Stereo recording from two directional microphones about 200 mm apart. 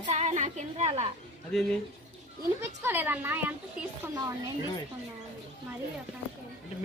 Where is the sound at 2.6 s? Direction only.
10° right (ahead or behind).